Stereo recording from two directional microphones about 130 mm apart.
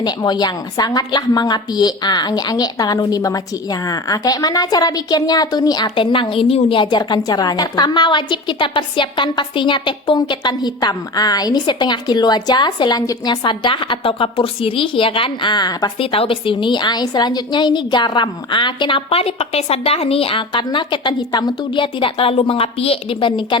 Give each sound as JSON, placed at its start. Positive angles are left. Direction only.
{"t": 0.0, "sound": "a woman's voice", "side_deg": 30}
{"t": 16.0, "sound": "a woman's voice", "side_deg": 45}